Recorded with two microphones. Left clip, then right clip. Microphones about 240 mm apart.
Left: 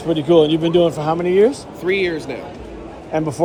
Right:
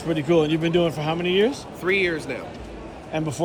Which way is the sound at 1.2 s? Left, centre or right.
Centre.